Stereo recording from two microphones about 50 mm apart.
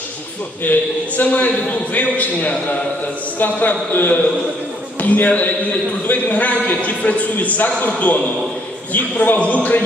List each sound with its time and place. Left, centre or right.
0.6 s a man's voice: left